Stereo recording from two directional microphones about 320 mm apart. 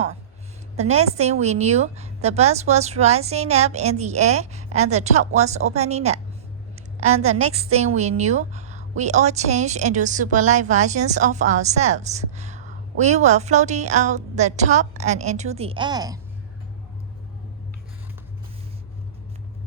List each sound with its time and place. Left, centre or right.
0.8 s a woman's voice: centre
7.2 s a woman's voice: centre